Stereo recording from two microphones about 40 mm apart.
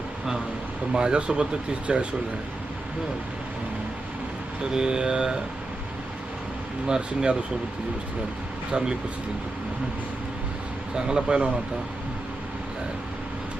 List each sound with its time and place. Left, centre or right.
0.9 s mantra: right
4.7 s mantra: centre
6.8 s mantra: centre
8.7 s mantra: right
10.9 s mantra: centre